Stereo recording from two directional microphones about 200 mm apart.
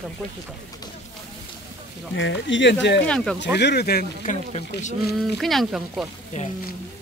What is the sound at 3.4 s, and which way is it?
Speech, 60° left (ahead or behind).